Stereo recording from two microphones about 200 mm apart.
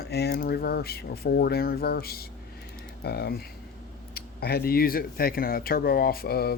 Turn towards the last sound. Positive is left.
turn(degrees=50)  # may be behind; listen again after turning